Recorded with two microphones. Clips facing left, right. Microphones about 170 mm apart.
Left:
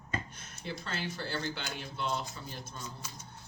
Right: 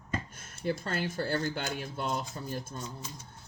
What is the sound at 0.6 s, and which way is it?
Speech, 50° right (ahead or behind).